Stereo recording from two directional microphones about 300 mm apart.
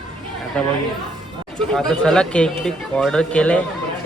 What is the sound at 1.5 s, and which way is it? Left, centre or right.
Speech, centre.